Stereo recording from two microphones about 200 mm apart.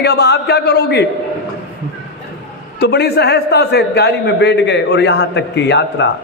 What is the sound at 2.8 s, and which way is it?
A man's voice, 55° left (ahead or behind).